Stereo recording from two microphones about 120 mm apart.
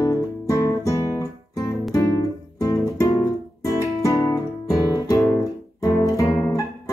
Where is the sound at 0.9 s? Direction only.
25° left (ahead or behind).